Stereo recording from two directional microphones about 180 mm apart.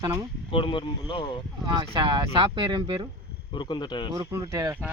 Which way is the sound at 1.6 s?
25° right (ahead or behind).